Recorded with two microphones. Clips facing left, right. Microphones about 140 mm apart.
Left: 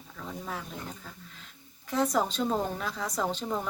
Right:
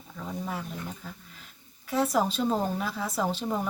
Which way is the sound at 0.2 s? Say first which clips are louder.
Right 3 dB; 5° right (ahead or behind).